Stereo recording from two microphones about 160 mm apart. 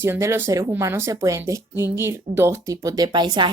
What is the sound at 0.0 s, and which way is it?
A woman's voice, 15° right (ahead or behind).